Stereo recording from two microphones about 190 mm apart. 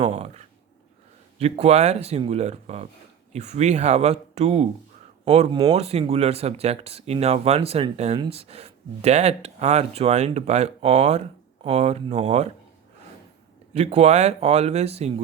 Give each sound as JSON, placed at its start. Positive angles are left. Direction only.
{"t": 0.0, "sound": "a sound", "side_deg": -35}
{"t": 1.4, "sound": "speech", "side_deg": -35}
{"t": 13.7, "sound": "speech", "side_deg": -35}